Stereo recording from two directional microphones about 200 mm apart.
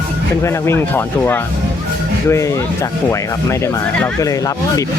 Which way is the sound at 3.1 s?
10° left (ahead or behind).